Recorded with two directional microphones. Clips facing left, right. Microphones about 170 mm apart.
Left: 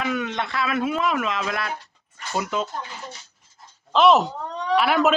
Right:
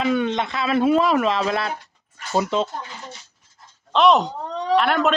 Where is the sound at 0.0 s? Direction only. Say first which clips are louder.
Right 5 dB; 25° right (ahead or behind).